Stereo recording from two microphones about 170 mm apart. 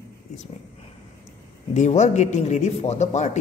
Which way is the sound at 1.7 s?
45° left (ahead or behind).